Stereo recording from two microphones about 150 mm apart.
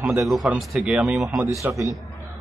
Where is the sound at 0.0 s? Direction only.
Centre (ahead or behind).